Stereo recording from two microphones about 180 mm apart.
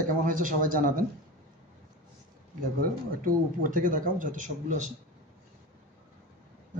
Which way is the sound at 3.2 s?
50° right (ahead or behind).